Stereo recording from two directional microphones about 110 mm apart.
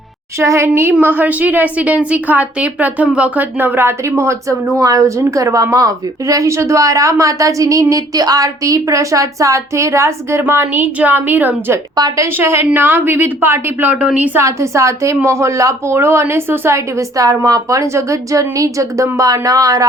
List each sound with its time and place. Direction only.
0.3 s a woman's voice: 25° right (ahead or behind)
11.9 s a woman's voice: 35° right (ahead or behind)
12.4 s a woman's voice: 20° right (ahead or behind)
14.3 s a woman's voice: 25° right (ahead or behind)